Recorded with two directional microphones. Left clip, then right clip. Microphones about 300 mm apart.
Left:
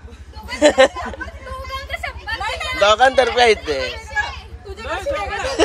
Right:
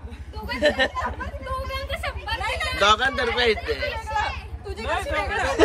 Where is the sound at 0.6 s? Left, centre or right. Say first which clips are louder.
Left 9 dB; left.